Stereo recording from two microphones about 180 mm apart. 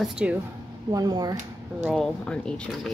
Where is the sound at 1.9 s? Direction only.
5° left (ahead or behind).